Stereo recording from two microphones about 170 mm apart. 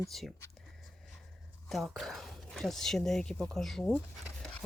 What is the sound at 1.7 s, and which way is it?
Speech, centre (ahead or behind).